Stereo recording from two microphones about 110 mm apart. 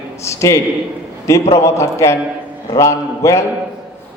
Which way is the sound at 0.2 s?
25° left (ahead or behind).